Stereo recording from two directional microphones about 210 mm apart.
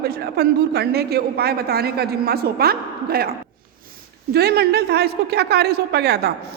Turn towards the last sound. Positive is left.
turn(degrees=-50)  # may be behind; listen again after turning